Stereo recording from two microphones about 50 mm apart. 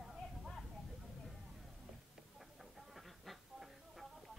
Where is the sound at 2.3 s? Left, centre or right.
Centre.